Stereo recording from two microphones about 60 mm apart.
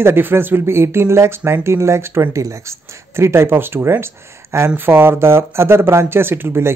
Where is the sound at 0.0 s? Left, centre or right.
Right.